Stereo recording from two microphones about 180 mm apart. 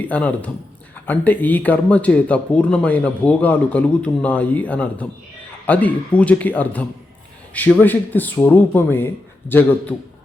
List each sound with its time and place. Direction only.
0.0 s speech: 10° left (ahead or behind)